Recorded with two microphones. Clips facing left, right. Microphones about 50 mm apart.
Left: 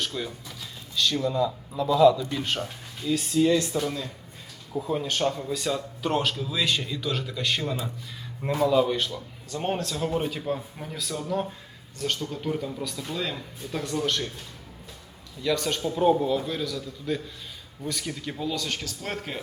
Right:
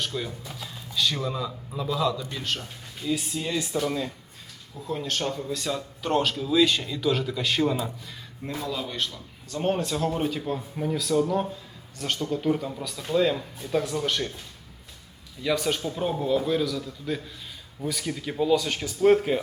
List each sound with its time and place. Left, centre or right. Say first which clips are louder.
0.0 s speech: even; centre
2.4 s a man's voice: left 2 dB; centre
3.0 s speech: left 6 dB; centre
4.9 s speech: left 2 dB; centre
8.6 s a man's voice: left 12 dB; centre
9.0 s speech: left 1 dB; centre
9.7 s speech: right 3 dB; centre
10.0 s speech: right 1 dB; centre
15.4 s speech: even; centre